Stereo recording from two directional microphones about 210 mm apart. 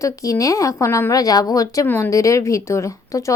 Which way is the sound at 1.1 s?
15° left (ahead or behind).